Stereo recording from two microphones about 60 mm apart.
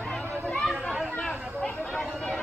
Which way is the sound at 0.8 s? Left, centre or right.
Centre.